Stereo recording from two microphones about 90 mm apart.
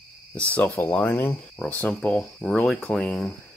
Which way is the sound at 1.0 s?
25° left (ahead or behind).